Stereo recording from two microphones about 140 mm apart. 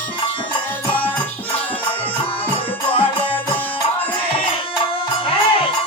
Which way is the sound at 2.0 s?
40° left (ahead or behind).